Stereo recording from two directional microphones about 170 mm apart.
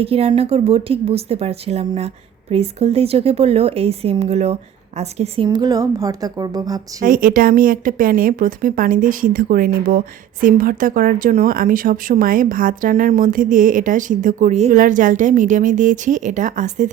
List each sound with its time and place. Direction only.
0.0 s speech: 35° right (ahead or behind)
5.5 s speech: 20° right (ahead or behind)
7.0 s speech: 55° right (ahead or behind)